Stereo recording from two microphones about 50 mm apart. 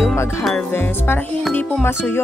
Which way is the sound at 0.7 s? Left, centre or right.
Left.